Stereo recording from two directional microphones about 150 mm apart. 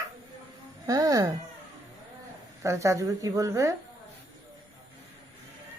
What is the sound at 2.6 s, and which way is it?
Child singing, 20° right (ahead or behind).